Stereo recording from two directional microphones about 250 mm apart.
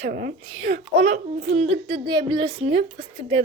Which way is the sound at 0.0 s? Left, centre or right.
Right.